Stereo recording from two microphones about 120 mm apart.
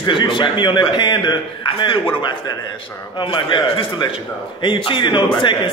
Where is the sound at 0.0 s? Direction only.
40° left (ahead or behind).